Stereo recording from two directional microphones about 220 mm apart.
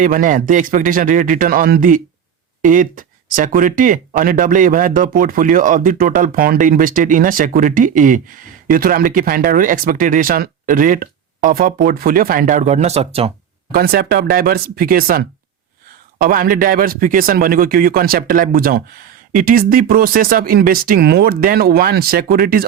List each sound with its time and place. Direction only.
0.0 s speech: 35° right (ahead or behind)
13.7 s speech: 45° right (ahead or behind)